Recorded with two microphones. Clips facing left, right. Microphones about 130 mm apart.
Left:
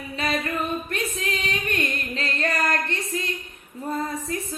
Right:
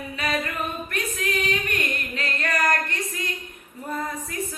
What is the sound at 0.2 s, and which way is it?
Female singing, 30° left (ahead or behind).